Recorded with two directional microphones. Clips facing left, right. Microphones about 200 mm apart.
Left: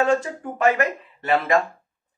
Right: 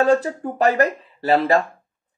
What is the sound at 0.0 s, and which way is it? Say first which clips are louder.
Speech: right 4 dB; 35° right (ahead or behind).